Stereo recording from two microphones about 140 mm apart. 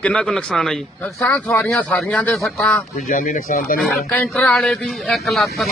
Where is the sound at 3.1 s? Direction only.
80° left.